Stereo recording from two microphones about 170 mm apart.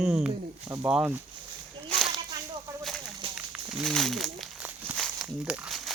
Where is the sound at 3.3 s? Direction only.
5° right (ahead or behind).